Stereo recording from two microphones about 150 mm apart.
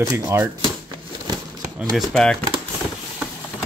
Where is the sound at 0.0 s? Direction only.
25° right (ahead or behind).